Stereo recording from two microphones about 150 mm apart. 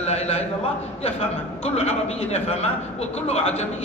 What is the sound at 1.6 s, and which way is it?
A man's voice, 45° left (ahead or behind).